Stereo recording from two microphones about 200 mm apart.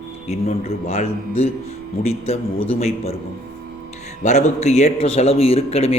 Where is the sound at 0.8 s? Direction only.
30° left (ahead or behind).